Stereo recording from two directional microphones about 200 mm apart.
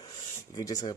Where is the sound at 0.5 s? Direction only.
15° left (ahead or behind).